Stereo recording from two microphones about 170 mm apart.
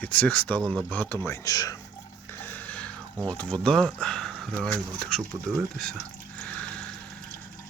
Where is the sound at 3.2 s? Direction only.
10° left (ahead or behind).